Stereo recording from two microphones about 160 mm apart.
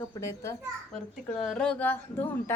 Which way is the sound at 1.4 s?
5° left (ahead or behind).